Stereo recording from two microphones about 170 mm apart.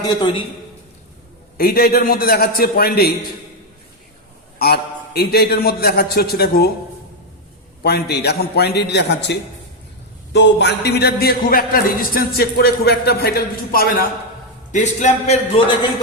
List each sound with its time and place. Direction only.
0.0 s a man's voice: 25° left (ahead or behind)
1.5 s a man's voice: 60° left (ahead or behind)
4.5 s a man's voice: 70° left (ahead or behind)
7.8 s a man's voice: 70° left (ahead or behind)
14.7 s a man's voice: 45° left (ahead or behind)